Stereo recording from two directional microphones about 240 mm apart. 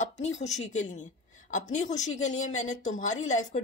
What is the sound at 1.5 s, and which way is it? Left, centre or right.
A woman's voice, left.